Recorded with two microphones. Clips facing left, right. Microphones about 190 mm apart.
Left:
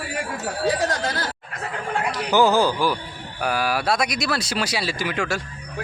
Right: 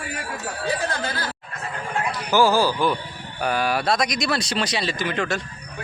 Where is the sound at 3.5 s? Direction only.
5° left (ahead or behind).